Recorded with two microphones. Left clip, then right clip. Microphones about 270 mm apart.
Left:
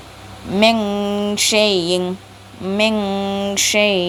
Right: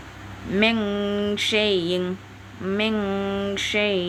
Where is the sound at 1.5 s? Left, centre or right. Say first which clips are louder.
Left 7 dB; centre.